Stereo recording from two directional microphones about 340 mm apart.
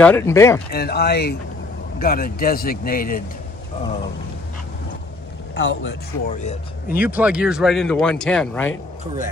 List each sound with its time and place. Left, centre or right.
0.0 s speech: centre
0.7 s speech: left
5.5 s speech: left
6.4 s speech: centre
7.0 s speech: centre